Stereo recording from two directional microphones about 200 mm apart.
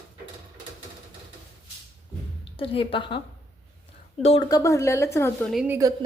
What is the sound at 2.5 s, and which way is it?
A woman's voice, 25° left (ahead or behind).